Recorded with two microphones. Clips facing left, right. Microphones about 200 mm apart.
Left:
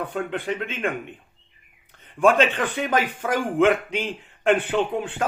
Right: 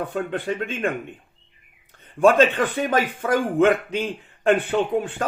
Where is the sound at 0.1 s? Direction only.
35° right (ahead or behind).